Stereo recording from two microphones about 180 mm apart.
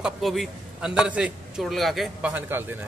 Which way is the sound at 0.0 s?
Centre (ahead or behind).